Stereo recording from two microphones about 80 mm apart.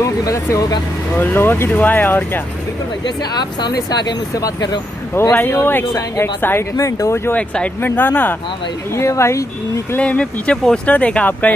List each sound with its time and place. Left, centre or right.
0.0 s speech: left
1.2 s speech: left
3.2 s speech: left
5.3 s speech: left
5.9 s speech: left
7.3 s speech: centre
8.9 s speech: left
9.9 s speech: centre